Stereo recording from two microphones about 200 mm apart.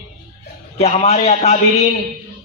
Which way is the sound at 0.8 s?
35° left (ahead or behind).